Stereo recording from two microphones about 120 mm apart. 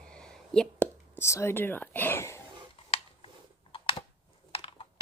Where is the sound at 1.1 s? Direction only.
25° left (ahead or behind).